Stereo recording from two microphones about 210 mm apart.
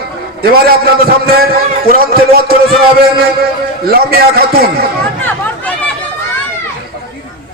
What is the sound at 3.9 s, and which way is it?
Speech, 45° right (ahead or behind).